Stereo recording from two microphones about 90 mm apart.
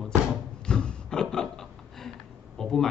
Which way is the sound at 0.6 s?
10° left (ahead or behind).